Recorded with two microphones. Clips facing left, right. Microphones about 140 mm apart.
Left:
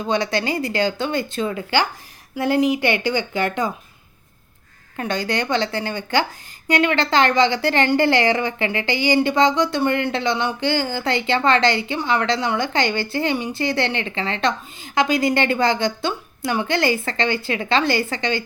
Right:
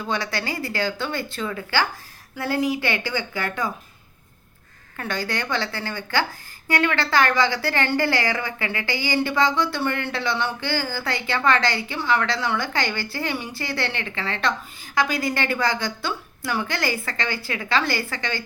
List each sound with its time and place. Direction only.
0.0 s a woman's voice: 20° left (ahead or behind)
4.9 s a woman's voice: 20° left (ahead or behind)